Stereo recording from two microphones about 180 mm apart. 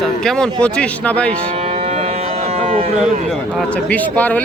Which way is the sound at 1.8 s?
35° right (ahead or behind).